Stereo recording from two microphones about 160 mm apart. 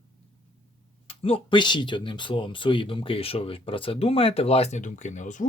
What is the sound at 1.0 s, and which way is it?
Speech, 35° left (ahead or behind).